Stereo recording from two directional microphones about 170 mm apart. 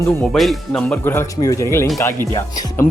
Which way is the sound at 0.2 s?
Centre (ahead or behind).